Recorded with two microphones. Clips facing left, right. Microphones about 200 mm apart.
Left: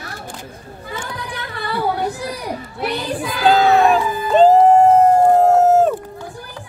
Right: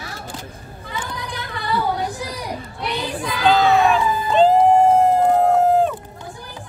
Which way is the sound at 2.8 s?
5° left (ahead or behind).